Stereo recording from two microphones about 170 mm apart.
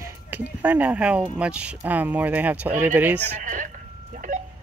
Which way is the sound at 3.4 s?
50° right (ahead or behind).